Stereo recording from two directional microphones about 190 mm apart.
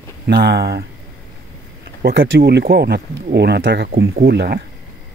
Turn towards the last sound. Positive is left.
turn(degrees=-55)  # may be behind; listen again after turning